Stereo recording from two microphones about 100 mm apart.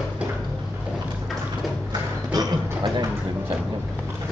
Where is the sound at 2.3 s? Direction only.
40° right (ahead or behind).